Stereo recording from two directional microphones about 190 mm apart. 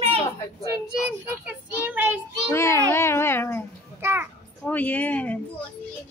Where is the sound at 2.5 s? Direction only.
15° left (ahead or behind).